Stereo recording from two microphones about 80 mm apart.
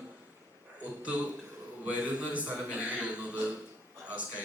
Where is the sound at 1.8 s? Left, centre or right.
Centre.